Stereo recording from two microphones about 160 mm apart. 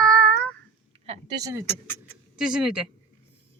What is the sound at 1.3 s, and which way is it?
Speech, 20° right (ahead or behind).